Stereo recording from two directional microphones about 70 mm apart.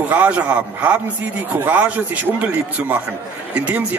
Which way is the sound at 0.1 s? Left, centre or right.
Right.